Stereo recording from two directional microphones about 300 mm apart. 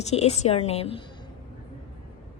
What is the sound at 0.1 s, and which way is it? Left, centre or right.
Speech, left.